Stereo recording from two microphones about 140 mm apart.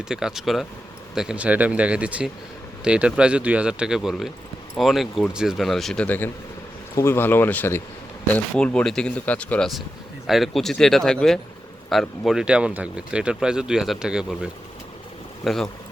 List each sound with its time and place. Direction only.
0.0 s speech: 5° right (ahead or behind)
15.4 s speech: centre (ahead or behind)